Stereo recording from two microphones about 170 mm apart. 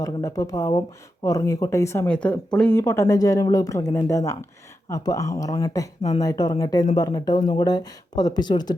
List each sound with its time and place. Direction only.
0.0 s speech: 20° left (ahead or behind)